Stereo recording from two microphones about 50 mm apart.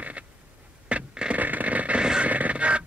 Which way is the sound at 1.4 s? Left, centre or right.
Right.